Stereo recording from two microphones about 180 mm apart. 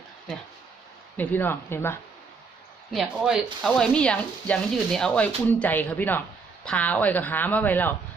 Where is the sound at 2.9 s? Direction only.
Centre (ahead or behind).